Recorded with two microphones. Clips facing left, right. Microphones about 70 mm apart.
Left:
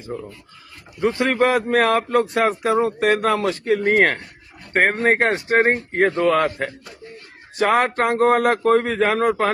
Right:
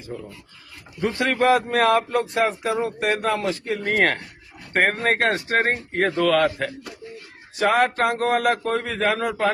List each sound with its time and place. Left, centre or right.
1.2 s speech: left
2.1 s speech: left
3.8 s speech: left
7.5 s speech: left